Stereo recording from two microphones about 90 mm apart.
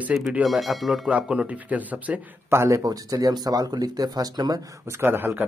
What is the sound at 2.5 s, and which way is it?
Speech, 30° right (ahead or behind).